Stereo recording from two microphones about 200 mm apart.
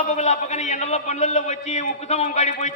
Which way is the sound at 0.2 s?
35° left (ahead or behind).